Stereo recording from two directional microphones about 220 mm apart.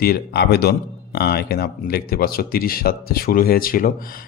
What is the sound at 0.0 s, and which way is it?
Speech, 45° left (ahead or behind).